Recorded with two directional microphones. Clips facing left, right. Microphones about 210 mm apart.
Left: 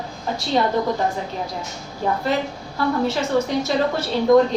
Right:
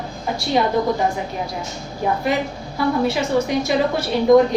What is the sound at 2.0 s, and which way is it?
A woman's voice, 15° right (ahead or behind).